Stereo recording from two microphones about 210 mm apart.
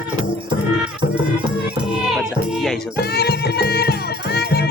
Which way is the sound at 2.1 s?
Centre (ahead or behind).